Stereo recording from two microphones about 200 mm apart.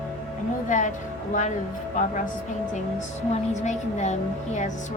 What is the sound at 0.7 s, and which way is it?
Speech, 40° left (ahead or behind).